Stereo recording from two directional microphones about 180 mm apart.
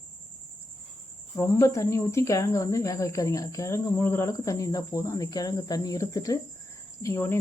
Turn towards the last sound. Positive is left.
turn(degrees=15)  # may be behind; listen again after turning